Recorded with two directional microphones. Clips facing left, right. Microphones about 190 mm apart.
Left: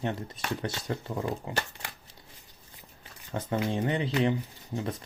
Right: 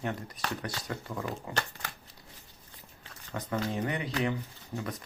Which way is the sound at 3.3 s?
25° left (ahead or behind).